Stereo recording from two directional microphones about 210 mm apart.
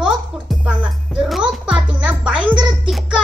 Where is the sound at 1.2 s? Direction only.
Centre (ahead or behind).